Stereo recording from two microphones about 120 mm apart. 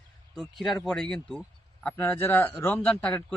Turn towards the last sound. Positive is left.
turn(degrees=10)  # may be behind; listen again after turning